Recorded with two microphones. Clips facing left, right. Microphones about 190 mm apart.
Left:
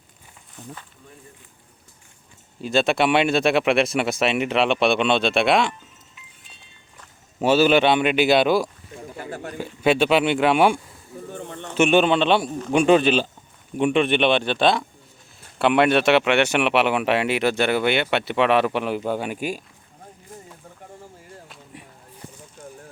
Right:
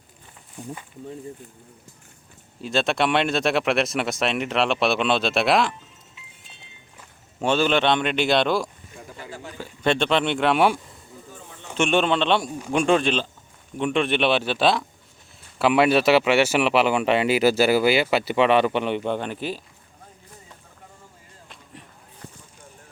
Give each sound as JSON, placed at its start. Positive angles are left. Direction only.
{"t": 0.5, "sound": "speech", "side_deg": -10}
{"t": 2.6, "sound": "speech", "side_deg": 0}
{"t": 7.4, "sound": "speech", "side_deg": 5}
{"t": 9.1, "sound": "a sound", "side_deg": 50}
{"t": 9.6, "sound": "speech", "side_deg": 5}
{"t": 11.3, "sound": "bird", "side_deg": 65}
{"t": 11.8, "sound": "speech", "side_deg": 5}
{"t": 21.4, "sound": "a sound", "side_deg": 5}